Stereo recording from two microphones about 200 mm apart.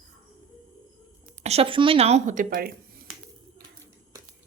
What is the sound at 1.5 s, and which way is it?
A woman's voice, 30° right (ahead or behind).